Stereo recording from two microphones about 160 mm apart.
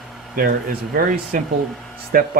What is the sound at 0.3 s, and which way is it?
Speech, 65° right (ahead or behind).